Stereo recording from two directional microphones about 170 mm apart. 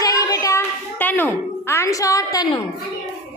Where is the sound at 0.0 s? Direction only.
20° left (ahead or behind).